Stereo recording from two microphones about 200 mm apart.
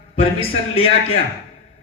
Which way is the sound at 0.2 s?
30° left (ahead or behind).